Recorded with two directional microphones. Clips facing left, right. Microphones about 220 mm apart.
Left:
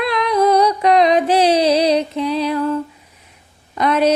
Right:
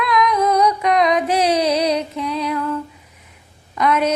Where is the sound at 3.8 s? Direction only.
30° left (ahead or behind).